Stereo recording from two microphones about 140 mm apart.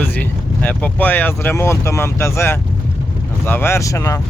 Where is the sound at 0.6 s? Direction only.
10° left (ahead or behind).